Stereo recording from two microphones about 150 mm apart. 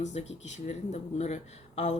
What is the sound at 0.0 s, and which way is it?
Speech, 50° left (ahead or behind).